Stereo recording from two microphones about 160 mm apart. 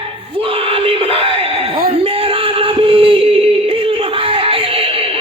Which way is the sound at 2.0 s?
35° right (ahead or behind).